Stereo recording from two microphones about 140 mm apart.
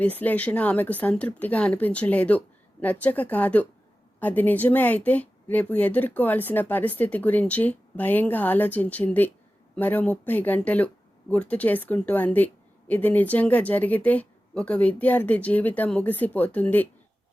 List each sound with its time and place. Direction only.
0.0 s speech: 10° left (ahead or behind)